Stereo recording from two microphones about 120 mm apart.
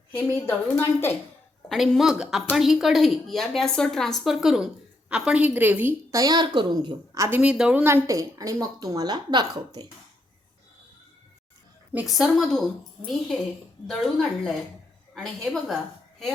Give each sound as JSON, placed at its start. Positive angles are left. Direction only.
{"t": 0.1, "sound": "a woman's voice", "side_deg": 15}
{"t": 1.7, "sound": "speech", "side_deg": 0}
{"t": 6.1, "sound": "a woman's voice", "side_deg": -30}
{"t": 7.1, "sound": "speech", "side_deg": -20}
{"t": 8.0, "sound": "a woman's voice", "side_deg": -30}
{"t": 12.0, "sound": "speech", "side_deg": 0}